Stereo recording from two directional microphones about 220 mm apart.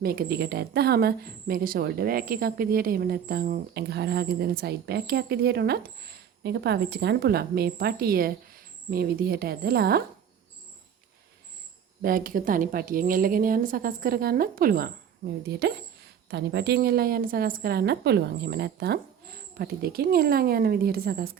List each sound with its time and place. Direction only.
0.0 s a woman's voice: 45° right (ahead or behind)
12.0 s a woman's voice: 40° right (ahead or behind)